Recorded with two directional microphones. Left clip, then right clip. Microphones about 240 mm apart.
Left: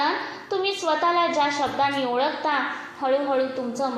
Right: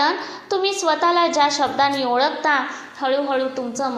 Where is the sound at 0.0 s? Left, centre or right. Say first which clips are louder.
Right 4 dB; right.